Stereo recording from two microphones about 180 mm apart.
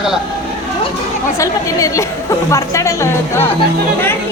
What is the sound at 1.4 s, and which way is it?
A woman's voice, 20° left (ahead or behind).